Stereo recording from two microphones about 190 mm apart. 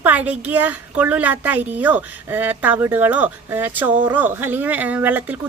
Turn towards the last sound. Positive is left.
turn(degrees=-10)  # may be behind; listen again after turning